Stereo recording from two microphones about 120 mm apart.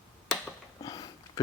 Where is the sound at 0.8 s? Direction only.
35° left (ahead or behind).